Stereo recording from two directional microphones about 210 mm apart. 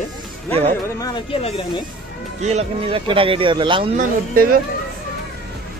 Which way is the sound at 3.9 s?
40° right (ahead or behind).